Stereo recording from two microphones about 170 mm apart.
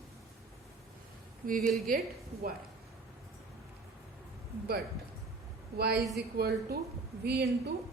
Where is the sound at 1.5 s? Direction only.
55° right (ahead or behind).